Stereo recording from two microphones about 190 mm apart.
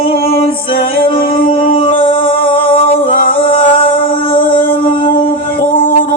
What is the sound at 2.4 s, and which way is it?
Music, 30° left (ahead or behind).